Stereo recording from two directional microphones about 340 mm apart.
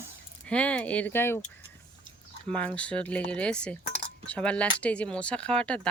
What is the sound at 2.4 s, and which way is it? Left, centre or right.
Speech, centre.